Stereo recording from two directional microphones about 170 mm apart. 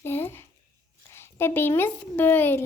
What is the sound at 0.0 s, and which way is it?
Speech, 15° left (ahead or behind).